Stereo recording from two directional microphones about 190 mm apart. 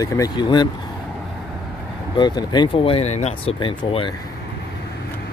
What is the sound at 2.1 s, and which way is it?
Speech, 25° left (ahead or behind).